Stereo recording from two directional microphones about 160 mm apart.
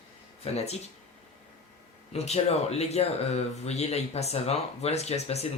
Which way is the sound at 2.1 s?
40° left (ahead or behind).